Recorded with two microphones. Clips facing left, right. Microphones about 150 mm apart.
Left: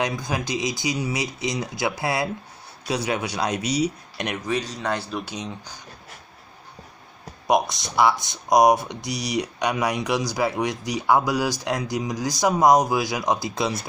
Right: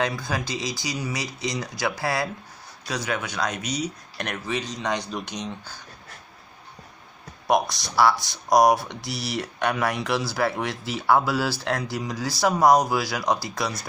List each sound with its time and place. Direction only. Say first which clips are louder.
0.0 s speech: left 1 dB; 15° left (ahead or behind)
4.2 s speech: left 3 dB; 10° left (ahead or behind)
7.4 s speech: left 1 dB; 20° left (ahead or behind)